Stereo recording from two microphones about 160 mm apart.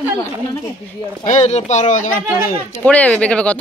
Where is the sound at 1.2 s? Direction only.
50° left (ahead or behind).